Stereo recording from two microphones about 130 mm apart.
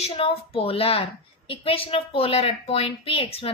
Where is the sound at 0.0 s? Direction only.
45° left (ahead or behind).